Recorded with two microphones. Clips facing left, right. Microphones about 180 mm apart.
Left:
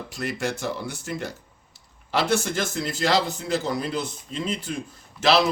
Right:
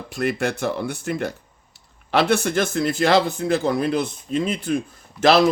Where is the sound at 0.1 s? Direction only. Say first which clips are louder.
Right 6 dB; 55° right (ahead or behind).